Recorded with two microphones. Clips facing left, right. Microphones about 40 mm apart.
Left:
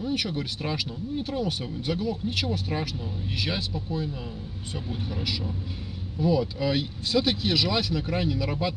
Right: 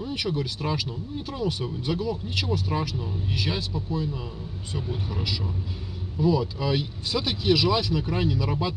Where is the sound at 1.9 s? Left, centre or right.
Centre.